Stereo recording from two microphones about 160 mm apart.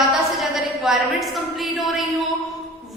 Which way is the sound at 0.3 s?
Centre (ahead or behind).